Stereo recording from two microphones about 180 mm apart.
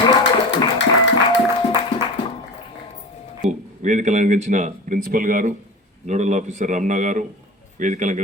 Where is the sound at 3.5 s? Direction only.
40° right (ahead or behind).